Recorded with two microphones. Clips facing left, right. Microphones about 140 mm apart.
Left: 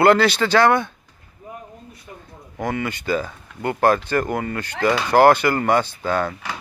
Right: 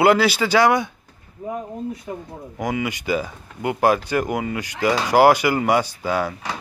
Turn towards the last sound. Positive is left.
turn(degrees=-10)  # may be behind; listen again after turning